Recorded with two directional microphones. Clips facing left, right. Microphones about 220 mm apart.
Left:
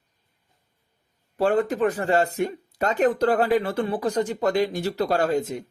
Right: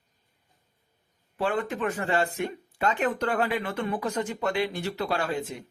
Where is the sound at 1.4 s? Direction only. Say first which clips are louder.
Left 7 dB; 40° left (ahead or behind).